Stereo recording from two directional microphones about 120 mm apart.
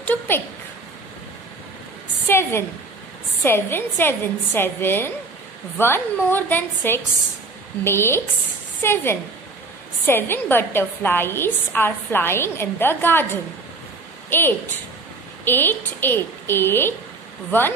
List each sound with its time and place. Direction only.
0.0 s a woman's voice: 15° left (ahead or behind)
2.2 s a woman's voice: 20° left (ahead or behind)
15.4 s a woman's voice: 15° left (ahead or behind)